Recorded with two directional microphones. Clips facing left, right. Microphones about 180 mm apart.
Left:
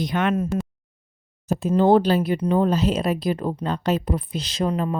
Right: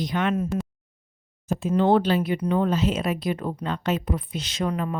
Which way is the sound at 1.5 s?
40° left (ahead or behind).